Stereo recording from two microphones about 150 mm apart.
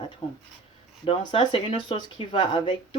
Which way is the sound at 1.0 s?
35° left (ahead or behind).